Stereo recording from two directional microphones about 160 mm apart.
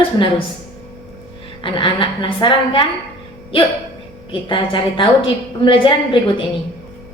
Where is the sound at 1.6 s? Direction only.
30° left (ahead or behind).